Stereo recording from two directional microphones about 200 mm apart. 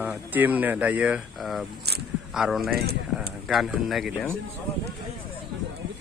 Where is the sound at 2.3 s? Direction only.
Centre (ahead or behind).